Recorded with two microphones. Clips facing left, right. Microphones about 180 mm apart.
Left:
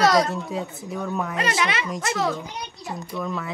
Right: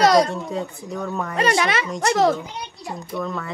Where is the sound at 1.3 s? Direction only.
40° right (ahead or behind).